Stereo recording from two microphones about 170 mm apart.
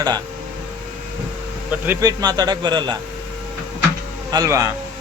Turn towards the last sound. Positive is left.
turn(degrees=-20)  # may be behind; listen again after turning